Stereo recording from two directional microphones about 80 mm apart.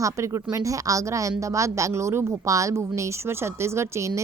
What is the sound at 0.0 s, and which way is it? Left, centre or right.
A woman's voice, right.